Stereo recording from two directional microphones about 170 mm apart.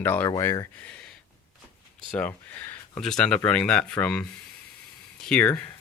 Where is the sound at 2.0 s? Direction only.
5° left (ahead or behind).